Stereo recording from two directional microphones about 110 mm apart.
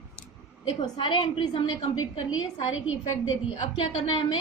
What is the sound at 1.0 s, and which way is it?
A woman's voice, 50° left (ahead or behind).